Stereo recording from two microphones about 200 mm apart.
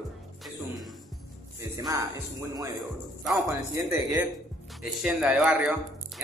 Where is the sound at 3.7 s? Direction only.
15° right (ahead or behind).